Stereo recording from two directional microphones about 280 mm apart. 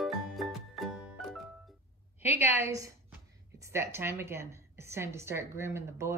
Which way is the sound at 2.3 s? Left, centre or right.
Left.